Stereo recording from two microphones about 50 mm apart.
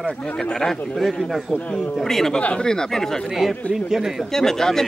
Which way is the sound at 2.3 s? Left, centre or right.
Centre.